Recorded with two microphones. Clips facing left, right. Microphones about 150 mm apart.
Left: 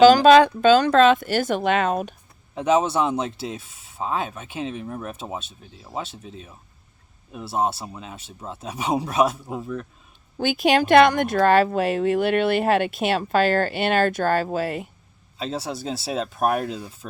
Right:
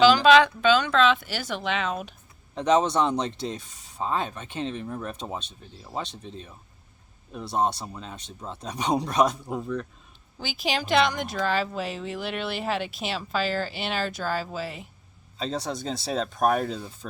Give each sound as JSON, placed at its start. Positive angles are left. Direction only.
{"t": 0.0, "sound": "speech", "side_deg": 45}
{"t": 2.6, "sound": "speech", "side_deg": 5}
{"t": 10.3, "sound": "speech", "side_deg": 55}
{"t": 15.4, "sound": "speech", "side_deg": 5}